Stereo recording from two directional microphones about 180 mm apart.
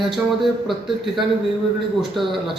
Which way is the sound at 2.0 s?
Centre (ahead or behind).